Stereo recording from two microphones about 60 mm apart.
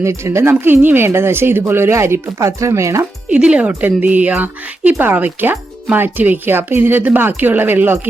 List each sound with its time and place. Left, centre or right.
0.0 s speech: right
2.5 s speech: right
3.2 s speech: centre; by 7.9 s right